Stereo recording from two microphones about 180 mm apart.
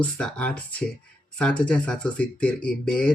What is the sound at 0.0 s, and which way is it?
Speech, 5° left (ahead or behind).